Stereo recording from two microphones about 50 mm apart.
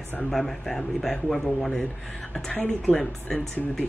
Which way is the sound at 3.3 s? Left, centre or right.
Centre.